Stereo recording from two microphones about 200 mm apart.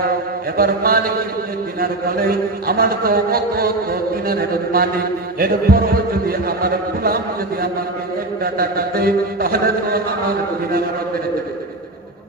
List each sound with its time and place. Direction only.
0.5 s a man's voice: 50° right (ahead or behind)
2.6 s a man's voice: 50° right (ahead or behind)
8.5 s a man's voice: 50° right (ahead or behind)